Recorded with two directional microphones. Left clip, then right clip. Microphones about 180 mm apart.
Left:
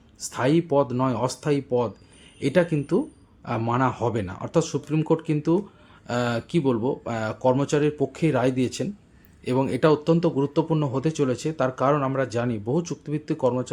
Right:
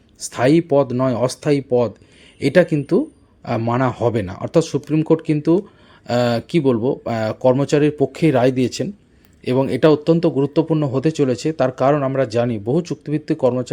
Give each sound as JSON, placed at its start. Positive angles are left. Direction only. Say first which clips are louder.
{"t": 0.2, "sound": "speech", "louder": "right 7 dB", "side_deg": -25}